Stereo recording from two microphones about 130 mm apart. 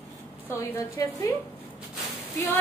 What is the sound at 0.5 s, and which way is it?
Speech, 25° left (ahead or behind).